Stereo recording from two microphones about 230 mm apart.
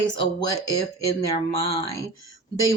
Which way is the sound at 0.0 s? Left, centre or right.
Centre.